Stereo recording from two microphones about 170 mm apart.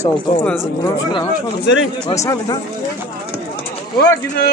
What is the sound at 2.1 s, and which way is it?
Speech, 20° left (ahead or behind).